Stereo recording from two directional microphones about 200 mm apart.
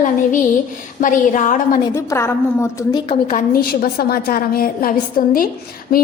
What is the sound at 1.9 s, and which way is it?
A woman's voice, 15° left (ahead or behind).